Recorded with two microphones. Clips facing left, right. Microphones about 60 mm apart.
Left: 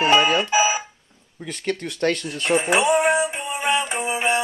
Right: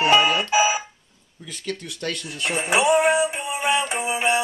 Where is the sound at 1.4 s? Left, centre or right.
Left.